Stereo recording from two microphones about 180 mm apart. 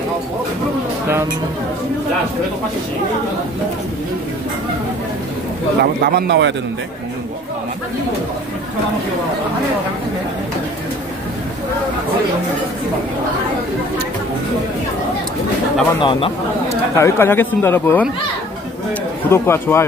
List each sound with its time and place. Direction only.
5.8 s a man's voice: 60° right (ahead or behind)
16.0 s speech: 30° left (ahead or behind)
16.9 s speech: 15° left (ahead or behind)
19.2 s speech: 15° left (ahead or behind)